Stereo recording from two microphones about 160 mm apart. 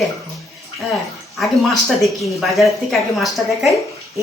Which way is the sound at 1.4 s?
Centre (ahead or behind).